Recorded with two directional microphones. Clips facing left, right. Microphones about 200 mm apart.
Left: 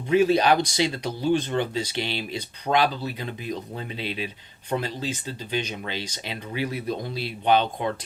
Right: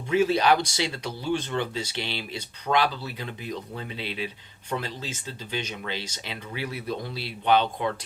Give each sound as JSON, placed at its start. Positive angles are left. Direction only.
{"t": 0.1, "sound": "speech", "side_deg": 15}
{"t": 2.7, "sound": "speech", "side_deg": 35}
{"t": 3.2, "sound": "speech", "side_deg": 15}